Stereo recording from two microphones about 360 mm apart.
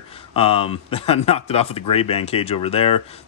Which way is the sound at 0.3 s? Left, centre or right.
Centre.